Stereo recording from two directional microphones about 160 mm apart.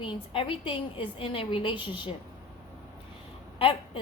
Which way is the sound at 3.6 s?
35° left (ahead or behind).